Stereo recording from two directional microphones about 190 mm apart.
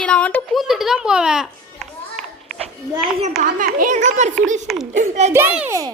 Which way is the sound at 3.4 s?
45° right (ahead or behind).